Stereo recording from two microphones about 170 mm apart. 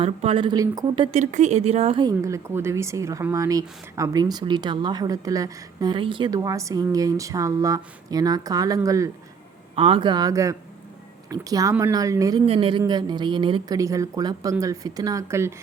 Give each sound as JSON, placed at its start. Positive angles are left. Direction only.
{"t": 0.0, "sound": "speech", "side_deg": -35}
{"t": 1.2, "sound": "speech", "side_deg": -45}
{"t": 2.0, "sound": "speech", "side_deg": -20}
{"t": 9.7, "sound": "speech", "side_deg": -35}
{"t": 12.5, "sound": "speech", "side_deg": -30}